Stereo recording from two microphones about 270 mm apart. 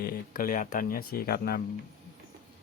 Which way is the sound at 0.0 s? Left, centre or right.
Left.